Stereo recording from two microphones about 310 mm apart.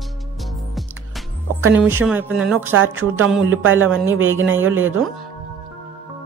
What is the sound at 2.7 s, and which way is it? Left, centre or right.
A woman's voice, right.